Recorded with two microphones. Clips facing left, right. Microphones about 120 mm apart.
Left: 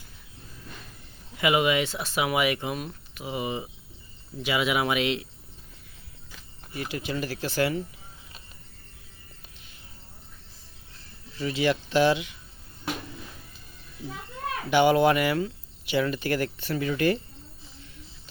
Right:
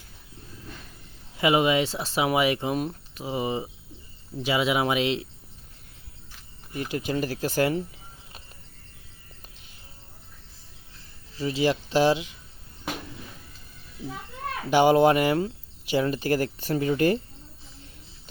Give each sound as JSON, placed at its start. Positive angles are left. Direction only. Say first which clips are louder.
{"t": 1.4, "sound": "speech", "louder": "right 2 dB", "side_deg": -30}
{"t": 6.7, "sound": "speech", "louder": "right 3 dB", "side_deg": -40}
{"t": 11.3, "sound": "speech", "louder": "right 1 dB", "side_deg": -30}
{"t": 14.7, "sound": "speech", "louder": "right 2 dB", "side_deg": -35}